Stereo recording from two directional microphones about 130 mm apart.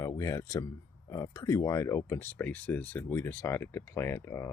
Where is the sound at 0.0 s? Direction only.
25° left (ahead or behind).